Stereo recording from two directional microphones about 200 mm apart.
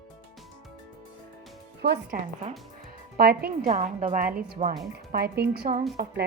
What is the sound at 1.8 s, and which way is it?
A woman's voice, 50° right (ahead or behind).